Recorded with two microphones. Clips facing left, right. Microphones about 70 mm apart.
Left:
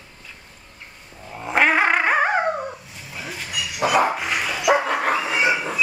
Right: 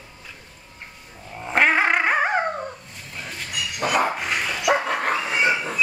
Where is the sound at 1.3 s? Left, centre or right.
Centre.